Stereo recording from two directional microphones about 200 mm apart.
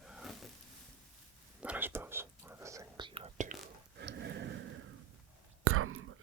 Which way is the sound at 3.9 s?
55° right (ahead or behind).